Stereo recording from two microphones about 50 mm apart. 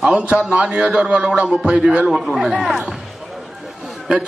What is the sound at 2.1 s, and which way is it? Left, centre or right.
Speech, centre.